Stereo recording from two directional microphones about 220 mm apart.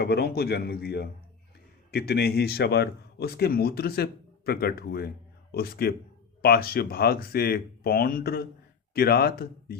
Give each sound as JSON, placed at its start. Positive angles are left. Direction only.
{"t": 0.0, "sound": "speech", "side_deg": 45}